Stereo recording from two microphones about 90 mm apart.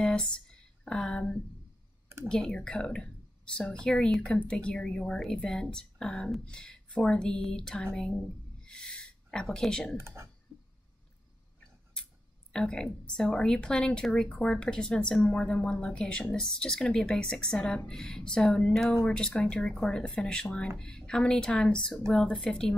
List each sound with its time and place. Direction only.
0.0 s a sound: 10° left (ahead or behind)
2.2 s speech: 10° left (ahead or behind)
9.9 s speech: 30° right (ahead or behind)
12.5 s speech: 5° left (ahead or behind)